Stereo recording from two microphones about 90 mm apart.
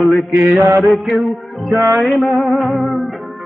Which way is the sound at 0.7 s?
Centre (ahead or behind).